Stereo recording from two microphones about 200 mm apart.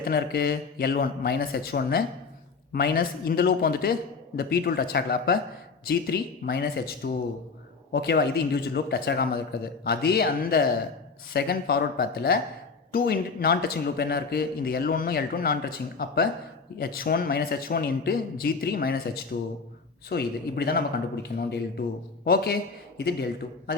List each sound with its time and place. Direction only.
0.0 s a man's voice: 50° left (ahead or behind)